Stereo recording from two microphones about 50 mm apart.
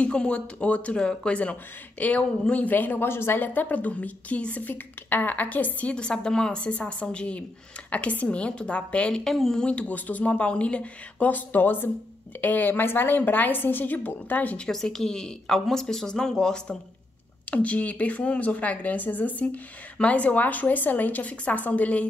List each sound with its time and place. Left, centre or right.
0.0 s speech: left
3.1 s a woman's voice: left
5.9 s speech: centre
9.1 s a woman's voice: centre
9.6 s a woman's voice: left
14.7 s a woman's voice: centre
17.5 s a woman's voice: left